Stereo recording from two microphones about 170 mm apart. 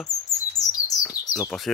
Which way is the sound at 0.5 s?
20° left (ahead or behind).